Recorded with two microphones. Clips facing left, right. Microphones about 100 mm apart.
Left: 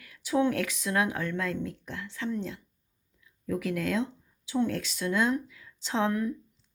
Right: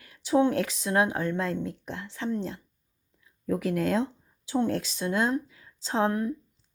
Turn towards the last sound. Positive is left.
turn(degrees=-35)  # may be behind; listen again after turning